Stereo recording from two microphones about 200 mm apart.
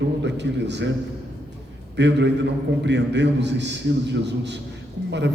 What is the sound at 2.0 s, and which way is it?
A man's voice, 60° right (ahead or behind).